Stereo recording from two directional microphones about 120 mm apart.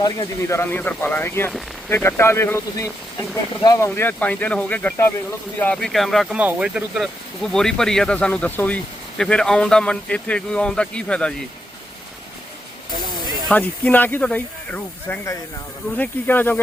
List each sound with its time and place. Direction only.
0.0 s speech: 25° left (ahead or behind)
3.8 s speech: 20° left (ahead or behind); by 6.2 s centre (ahead or behind)
6.3 s speech: 10° right (ahead or behind); by 11.3 s 10° left (ahead or behind)
13.5 s speech: 15° left (ahead or behind)